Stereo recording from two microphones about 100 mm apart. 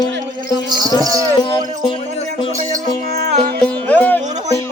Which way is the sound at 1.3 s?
50° left (ahead or behind).